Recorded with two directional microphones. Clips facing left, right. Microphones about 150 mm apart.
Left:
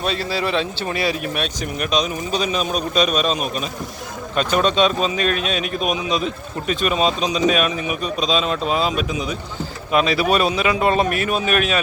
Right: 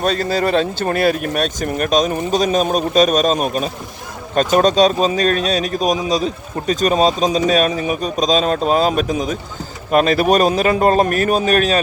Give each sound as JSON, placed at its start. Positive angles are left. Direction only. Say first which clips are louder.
{"t": 0.0, "sound": "a man's voice", "louder": "right 5 dB", "side_deg": -45}